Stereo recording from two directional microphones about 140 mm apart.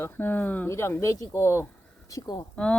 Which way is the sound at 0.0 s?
15° left (ahead or behind).